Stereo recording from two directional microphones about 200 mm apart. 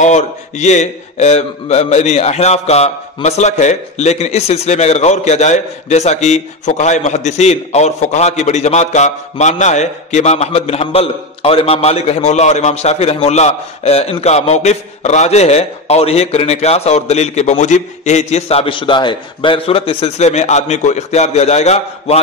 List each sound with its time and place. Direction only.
0.0 s a man's voice: 35° left (ahead or behind)